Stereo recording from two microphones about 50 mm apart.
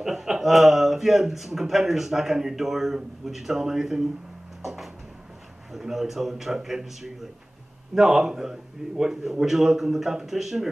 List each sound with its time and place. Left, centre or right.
0.0 s a man's voice: centre
5.7 s a man's voice: centre